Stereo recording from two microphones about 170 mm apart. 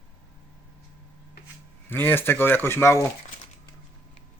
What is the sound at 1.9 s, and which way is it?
Speech, 10° left (ahead or behind).